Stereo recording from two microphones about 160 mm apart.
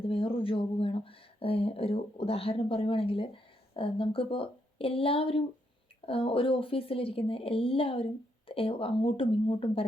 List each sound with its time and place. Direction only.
0.1 s speech: 35° left (ahead or behind)